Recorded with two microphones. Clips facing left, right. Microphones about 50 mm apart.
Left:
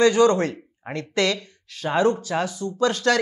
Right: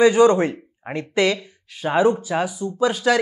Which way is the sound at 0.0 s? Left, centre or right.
Centre.